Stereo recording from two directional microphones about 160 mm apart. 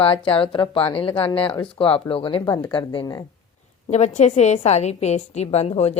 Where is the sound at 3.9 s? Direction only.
45° left (ahead or behind).